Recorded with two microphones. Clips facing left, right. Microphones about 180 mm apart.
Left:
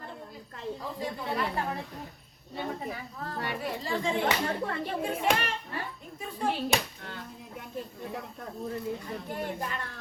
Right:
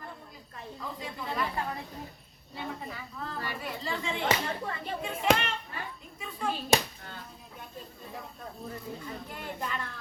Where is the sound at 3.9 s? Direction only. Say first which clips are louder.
Left 2 dB; 45° left (ahead or behind).